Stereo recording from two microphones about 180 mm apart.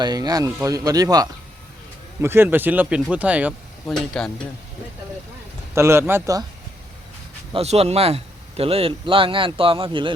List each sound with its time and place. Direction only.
0.0 s speech: 20° right (ahead or behind)
3.8 s speech: 5° left (ahead or behind)
5.7 s speech: 15° right (ahead or behind)
7.5 s speech: 35° right (ahead or behind)